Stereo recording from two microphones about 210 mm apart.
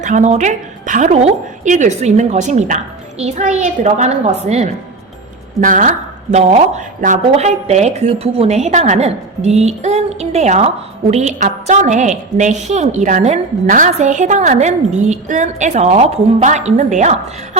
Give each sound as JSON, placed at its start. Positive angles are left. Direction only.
{"t": 0.0, "sound": "a woman's voice", "side_deg": -35}